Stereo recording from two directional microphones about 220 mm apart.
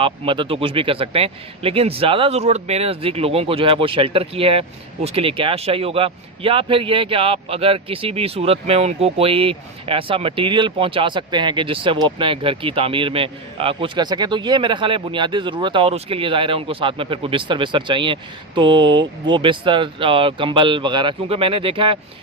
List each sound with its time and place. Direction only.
0.0 s speech: 25° right (ahead or behind)